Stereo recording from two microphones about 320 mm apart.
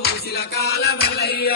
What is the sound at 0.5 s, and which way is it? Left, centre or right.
Music, left.